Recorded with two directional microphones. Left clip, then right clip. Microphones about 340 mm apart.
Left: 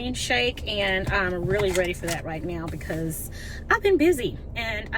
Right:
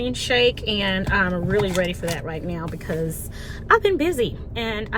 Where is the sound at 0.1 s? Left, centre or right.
Left.